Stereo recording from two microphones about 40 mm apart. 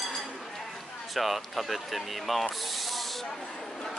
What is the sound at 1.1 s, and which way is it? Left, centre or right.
Speech, centre.